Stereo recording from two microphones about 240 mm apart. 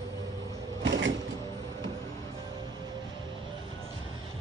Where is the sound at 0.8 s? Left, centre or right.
Right.